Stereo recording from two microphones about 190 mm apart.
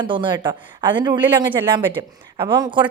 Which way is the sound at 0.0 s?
25° right (ahead or behind).